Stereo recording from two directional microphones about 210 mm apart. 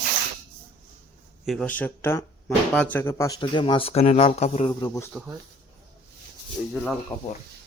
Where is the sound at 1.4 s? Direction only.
Centre (ahead or behind); by 4.7 s 30° left (ahead or behind).